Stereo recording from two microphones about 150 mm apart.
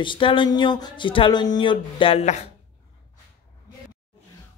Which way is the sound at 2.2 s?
50° left (ahead or behind).